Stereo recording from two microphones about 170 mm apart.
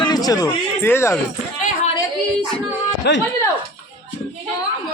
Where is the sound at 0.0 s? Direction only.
25° left (ahead or behind).